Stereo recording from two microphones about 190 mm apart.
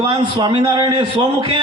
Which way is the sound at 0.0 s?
20° right (ahead or behind).